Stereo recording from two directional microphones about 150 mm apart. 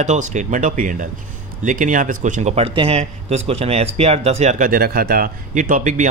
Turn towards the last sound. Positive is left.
turn(degrees=-60)  # may be behind; listen again after turning